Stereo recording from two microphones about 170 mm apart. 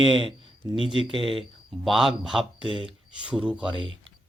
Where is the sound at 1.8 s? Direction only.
Centre (ahead or behind).